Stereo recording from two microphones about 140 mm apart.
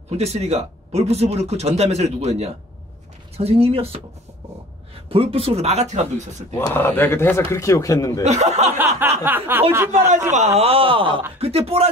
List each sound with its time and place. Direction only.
0.1 s speech: 50° right (ahead or behind)
5.1 s speech: 40° right (ahead or behind)
6.7 s a man's voice: 15° left (ahead or behind)
8.2 s speech: 50° right (ahead or behind)
8.7 s speech: 15° right (ahead or behind)
10.3 s speech: 50° right (ahead or behind)